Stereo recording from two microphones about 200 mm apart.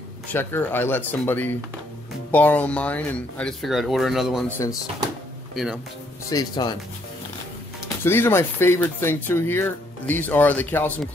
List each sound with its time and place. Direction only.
0.3 s speech: 10° left (ahead or behind)
4.5 s speech: 15° left (ahead or behind)
5.5 s speech: centre (ahead or behind)
6.2 s speech: 20° left (ahead or behind)
8.0 s speech: 10° left (ahead or behind)